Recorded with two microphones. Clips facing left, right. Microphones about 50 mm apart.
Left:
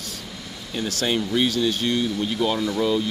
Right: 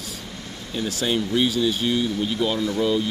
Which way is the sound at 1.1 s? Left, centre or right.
Centre.